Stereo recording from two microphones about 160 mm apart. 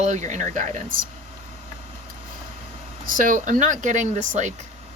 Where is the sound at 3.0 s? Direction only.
60° right (ahead or behind).